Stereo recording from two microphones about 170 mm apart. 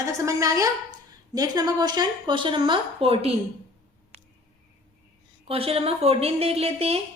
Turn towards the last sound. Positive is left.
turn(degrees=-35)  # may be behind; listen again after turning